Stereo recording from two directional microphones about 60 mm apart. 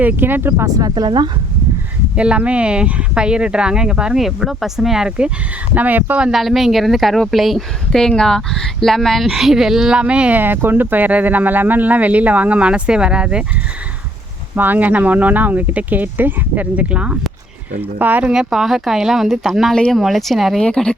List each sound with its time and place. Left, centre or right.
0.0 s speech: right
1.0 s speech: right
2.1 s speech: centre
5.7 s speech: right
6.3 s speech: centre
7.9 s speech: centre
10.0 s speech: centre
10.4 s speech: right; by 13.4 s centre
14.5 s speech: right
18.0 s speech: right
18.3 s speech: centre
19.7 s speech: centre
20.0 s speech: centre
20.7 s speech: centre